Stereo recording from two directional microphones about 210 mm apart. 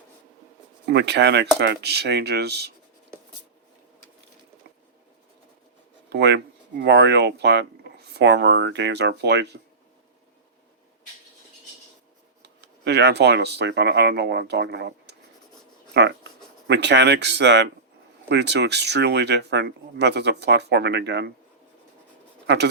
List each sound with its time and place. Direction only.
0.9 s speech: 55° right (ahead or behind)
6.1 s speech: 50° right (ahead or behind)
12.4 s speech: 55° right (ahead or behind)
22.4 s speech: 50° right (ahead or behind)